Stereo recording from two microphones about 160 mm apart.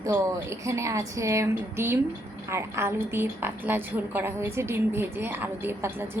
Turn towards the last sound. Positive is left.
turn(degrees=-15)  # may be behind; listen again after turning